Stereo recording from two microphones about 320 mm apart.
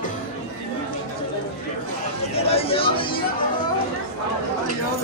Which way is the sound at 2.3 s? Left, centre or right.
Centre.